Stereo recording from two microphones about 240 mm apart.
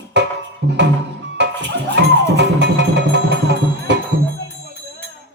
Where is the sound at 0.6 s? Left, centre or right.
Right.